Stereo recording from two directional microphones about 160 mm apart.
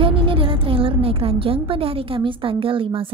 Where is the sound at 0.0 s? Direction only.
35° right (ahead or behind).